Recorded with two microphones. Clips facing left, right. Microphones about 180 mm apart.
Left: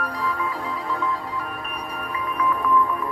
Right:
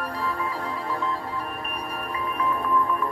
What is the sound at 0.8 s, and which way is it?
Music, 35° right (ahead or behind).